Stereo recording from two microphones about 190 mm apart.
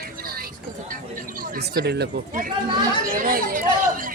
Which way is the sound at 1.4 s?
55° right (ahead or behind).